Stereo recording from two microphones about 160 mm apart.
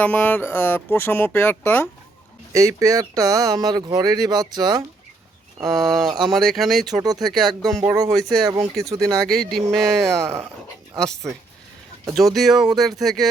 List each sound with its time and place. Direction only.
0.0 s speech: 10° left (ahead or behind)
2.5 s speech: 20° right (ahead or behind)
5.6 s speech: centre (ahead or behind)
6.1 s speech: 25° right (ahead or behind)
6.3 s speech: centre (ahead or behind)
7.8 s speech: 20° right (ahead or behind)
9.1 s speech: centre (ahead or behind)
12.1 s speech: centre (ahead or behind)